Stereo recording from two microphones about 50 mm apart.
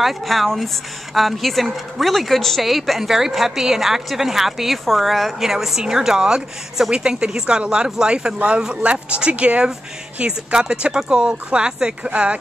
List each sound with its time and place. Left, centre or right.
0.0 s a woman's voice: centre; by 12.4 s right